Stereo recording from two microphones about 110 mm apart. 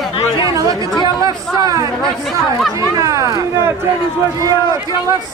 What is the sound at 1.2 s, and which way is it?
Speech, 35° right (ahead or behind).